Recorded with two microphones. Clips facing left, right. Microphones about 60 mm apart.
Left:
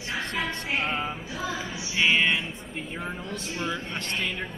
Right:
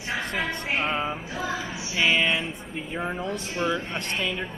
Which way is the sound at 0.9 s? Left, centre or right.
Centre.